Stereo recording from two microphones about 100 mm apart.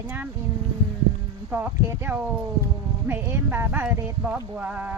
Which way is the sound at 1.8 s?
20° right (ahead or behind).